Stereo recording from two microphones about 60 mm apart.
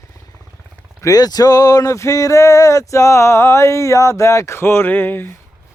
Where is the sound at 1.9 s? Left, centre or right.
Left.